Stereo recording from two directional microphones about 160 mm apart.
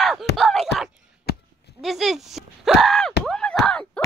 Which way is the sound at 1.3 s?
85° left.